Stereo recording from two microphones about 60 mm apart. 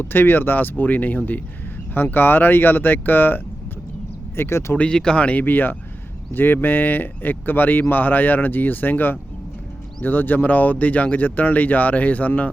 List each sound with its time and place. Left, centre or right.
0.0 s speech: left
4.4 s speech: left
4.9 s speech: centre